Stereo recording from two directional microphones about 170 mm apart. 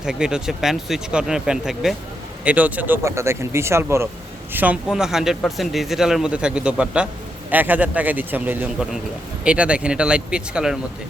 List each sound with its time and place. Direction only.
0.0 s a man's voice: 5° right (ahead or behind)